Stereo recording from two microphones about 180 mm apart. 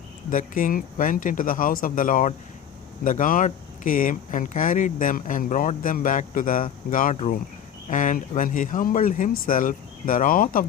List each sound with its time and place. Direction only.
0.3 s speech: 50° left (ahead or behind)